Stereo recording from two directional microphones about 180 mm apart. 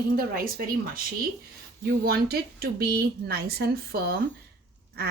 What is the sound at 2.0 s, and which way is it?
Speech, 60° right (ahead or behind).